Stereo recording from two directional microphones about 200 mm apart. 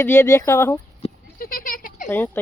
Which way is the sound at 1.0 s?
30° left (ahead or behind).